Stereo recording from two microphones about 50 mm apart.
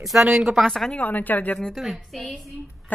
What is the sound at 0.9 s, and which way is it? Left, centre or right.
Speech, left.